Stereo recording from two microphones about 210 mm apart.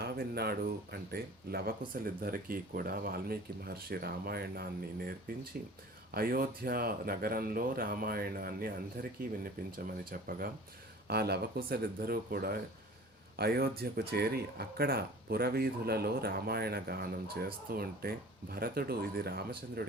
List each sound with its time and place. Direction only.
0.0 s speech: 50° right (ahead or behind)